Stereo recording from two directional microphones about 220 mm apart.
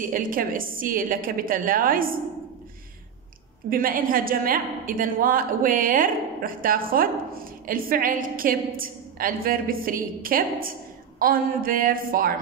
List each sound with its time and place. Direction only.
0.1 s a woman's voice: 40° right (ahead or behind)
3.7 s a woman's voice: 40° right (ahead or behind)